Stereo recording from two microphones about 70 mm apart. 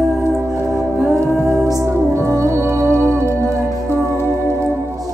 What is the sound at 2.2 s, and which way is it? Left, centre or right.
Music, right.